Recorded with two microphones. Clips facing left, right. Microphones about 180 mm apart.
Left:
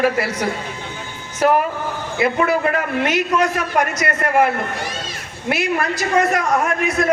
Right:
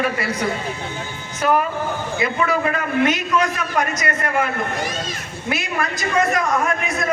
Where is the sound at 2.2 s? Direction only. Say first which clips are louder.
Left 4 dB; 55° left (ahead or behind).